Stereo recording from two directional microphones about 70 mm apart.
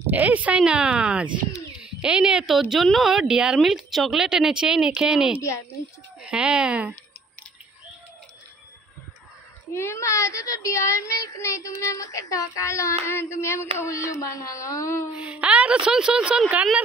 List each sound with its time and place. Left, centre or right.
0.0 s a woman's voice: right
9.8 s a child's voice: left
13.0 s a child's voice: left
15.1 s a woman's voice: centre